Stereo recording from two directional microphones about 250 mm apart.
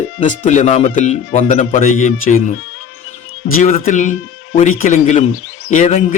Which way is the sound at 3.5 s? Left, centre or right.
Left.